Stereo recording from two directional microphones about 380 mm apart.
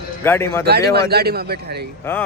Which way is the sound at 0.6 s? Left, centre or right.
Right.